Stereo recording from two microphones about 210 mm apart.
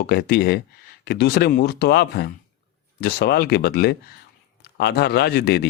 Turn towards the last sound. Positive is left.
turn(degrees=50)  # may be behind; listen again after turning